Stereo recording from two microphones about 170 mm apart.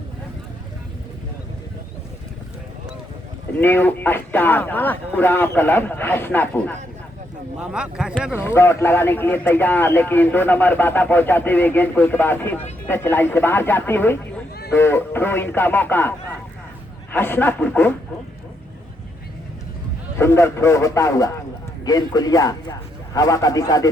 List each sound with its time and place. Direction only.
3.6 s speech: 10° left (ahead or behind)
7.6 s speech: 5° right (ahead or behind)
8.4 s speech: 15° left (ahead or behind)
20.1 s a man's voice: 15° left (ahead or behind)